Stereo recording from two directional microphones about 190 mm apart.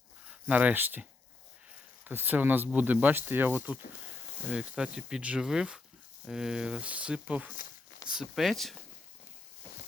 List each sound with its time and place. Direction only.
0.3 s speech: 5° right (ahead or behind)
2.0 s speech: 10° right (ahead or behind)